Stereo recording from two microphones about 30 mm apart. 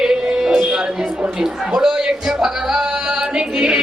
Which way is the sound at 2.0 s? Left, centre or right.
Right.